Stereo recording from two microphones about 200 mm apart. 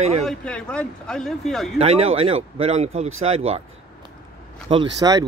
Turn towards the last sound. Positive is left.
turn(degrees=-20)  # may be behind; listen again after turning